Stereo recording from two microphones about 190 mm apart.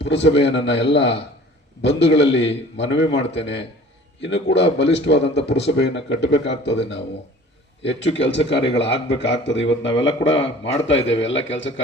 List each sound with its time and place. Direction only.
0.0 s speech: 70° left (ahead or behind)